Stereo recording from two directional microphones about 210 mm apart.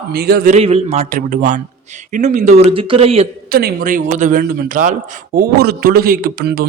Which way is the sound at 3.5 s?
45° right (ahead or behind).